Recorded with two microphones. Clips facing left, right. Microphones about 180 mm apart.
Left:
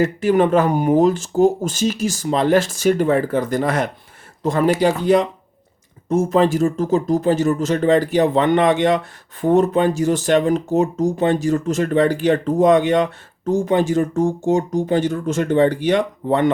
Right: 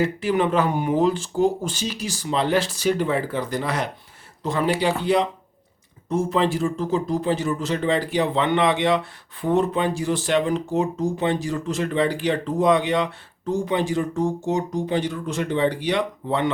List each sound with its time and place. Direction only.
0.0 s speech: 45° left (ahead or behind)